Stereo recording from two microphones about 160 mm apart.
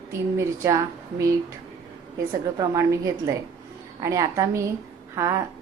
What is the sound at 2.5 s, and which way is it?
Speech, 20° right (ahead or behind).